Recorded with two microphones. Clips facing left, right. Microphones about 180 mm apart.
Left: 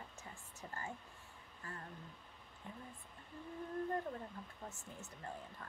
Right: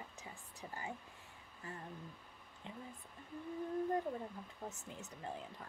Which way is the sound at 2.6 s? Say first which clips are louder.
Right 2 dB; 20° right (ahead or behind).